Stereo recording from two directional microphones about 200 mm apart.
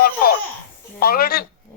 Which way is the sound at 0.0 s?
50° left (ahead or behind).